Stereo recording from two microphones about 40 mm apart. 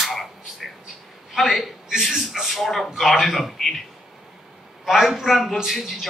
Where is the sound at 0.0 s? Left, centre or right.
Centre.